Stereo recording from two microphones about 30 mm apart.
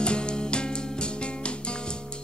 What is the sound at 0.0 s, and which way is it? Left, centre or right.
Music, left.